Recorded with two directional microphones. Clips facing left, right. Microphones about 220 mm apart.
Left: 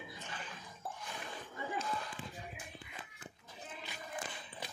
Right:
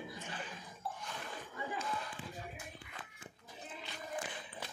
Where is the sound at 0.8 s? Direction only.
50° left (ahead or behind).